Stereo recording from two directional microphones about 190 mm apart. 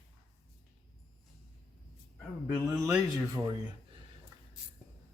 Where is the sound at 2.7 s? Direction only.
15° right (ahead or behind).